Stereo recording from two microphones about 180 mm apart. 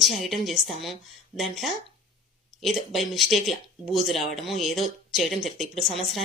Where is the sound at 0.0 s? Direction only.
Centre (ahead or behind).